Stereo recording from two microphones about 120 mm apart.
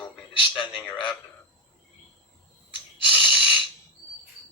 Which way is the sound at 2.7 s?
40° left (ahead or behind).